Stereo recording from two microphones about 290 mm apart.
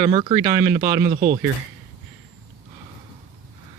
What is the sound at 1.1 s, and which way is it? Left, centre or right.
Speech, right.